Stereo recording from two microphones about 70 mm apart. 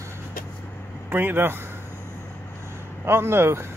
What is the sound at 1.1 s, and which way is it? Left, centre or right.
Speech, right.